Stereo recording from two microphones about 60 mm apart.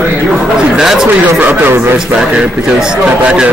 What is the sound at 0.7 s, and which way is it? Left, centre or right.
Speech, centre.